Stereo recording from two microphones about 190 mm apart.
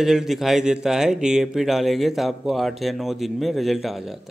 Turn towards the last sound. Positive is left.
turn(degrees=0)  # may be behind; listen again after turning